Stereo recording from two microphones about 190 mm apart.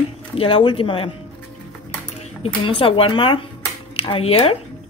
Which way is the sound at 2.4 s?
30° left (ahead or behind).